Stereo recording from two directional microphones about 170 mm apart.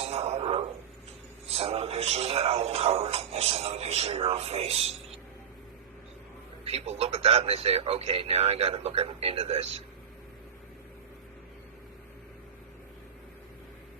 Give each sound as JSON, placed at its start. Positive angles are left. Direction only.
{"t": 0.0, "sound": "a sound", "side_deg": -35}
{"t": 1.5, "sound": "speech", "side_deg": -35}
{"t": 6.7, "sound": "speech", "side_deg": -40}